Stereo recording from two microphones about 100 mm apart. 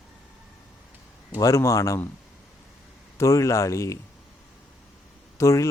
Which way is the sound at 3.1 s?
30° left (ahead or behind).